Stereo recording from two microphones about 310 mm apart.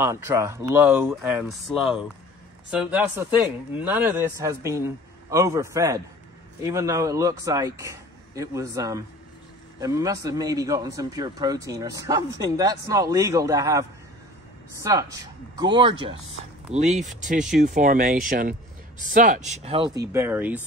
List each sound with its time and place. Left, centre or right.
0.0 s a man's voice: centre